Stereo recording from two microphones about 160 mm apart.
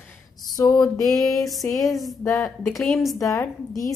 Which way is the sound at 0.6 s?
20° left (ahead or behind).